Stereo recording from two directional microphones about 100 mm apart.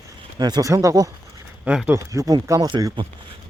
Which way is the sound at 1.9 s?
30° right (ahead or behind).